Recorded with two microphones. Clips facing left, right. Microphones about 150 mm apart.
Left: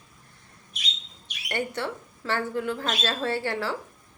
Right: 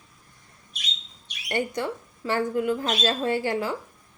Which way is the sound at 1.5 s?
15° right (ahead or behind).